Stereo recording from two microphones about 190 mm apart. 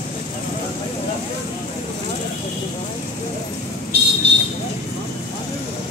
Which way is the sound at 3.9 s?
60° right (ahead or behind).